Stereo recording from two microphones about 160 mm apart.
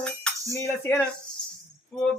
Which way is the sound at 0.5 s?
15° left (ahead or behind).